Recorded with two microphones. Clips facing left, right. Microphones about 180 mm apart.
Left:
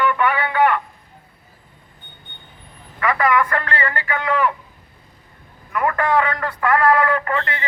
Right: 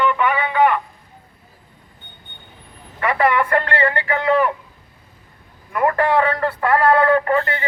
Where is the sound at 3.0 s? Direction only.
30° right (ahead or behind).